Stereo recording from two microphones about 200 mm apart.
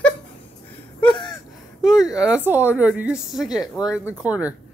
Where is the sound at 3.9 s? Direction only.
5° right (ahead or behind).